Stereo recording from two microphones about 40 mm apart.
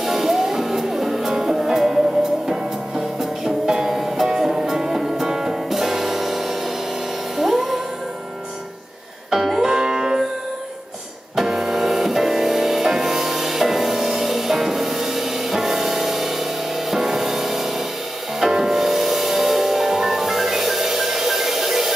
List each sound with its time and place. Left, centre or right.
0.0 s music: centre
9.3 s music: centre
11.3 s music: centre